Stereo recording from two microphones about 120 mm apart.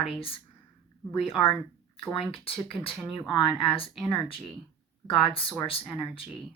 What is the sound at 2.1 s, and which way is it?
Speech, 50° left (ahead or behind).